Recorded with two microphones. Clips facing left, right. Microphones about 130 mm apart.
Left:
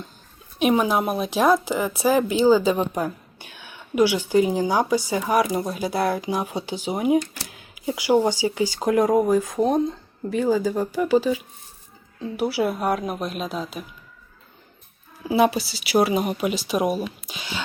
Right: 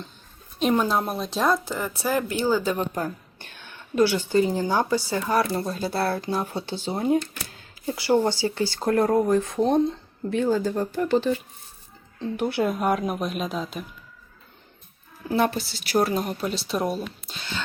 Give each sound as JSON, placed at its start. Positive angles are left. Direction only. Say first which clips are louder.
{"t": 0.6, "sound": "a woman's voice", "louder": "left 2 dB", "side_deg": 10}
{"t": 15.3, "sound": "a woman's voice", "louder": "left 4 dB", "side_deg": 10}